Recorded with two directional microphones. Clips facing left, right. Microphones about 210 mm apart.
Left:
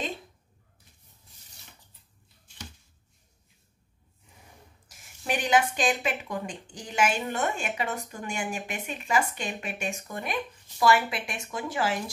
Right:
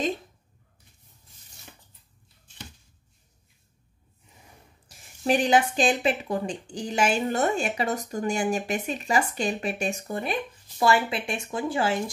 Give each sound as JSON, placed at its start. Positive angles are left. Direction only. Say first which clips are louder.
{"t": 4.8, "sound": "a woman's voice", "louder": "right 8 dB", "side_deg": -30}